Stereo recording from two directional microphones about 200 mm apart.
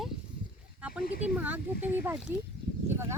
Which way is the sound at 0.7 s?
5° right (ahead or behind).